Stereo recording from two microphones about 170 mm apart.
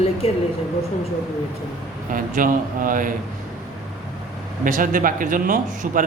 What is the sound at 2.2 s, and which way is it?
Speech, 50° right (ahead or behind).